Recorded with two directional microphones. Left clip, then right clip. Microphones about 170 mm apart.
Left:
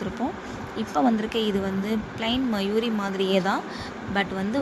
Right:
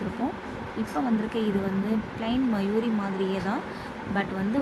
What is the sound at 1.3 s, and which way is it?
Speech, 50° left (ahead or behind).